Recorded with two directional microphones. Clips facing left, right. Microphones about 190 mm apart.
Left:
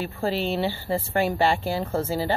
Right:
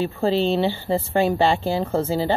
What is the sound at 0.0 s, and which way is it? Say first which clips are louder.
Speech: right 6 dB; 20° right (ahead or behind).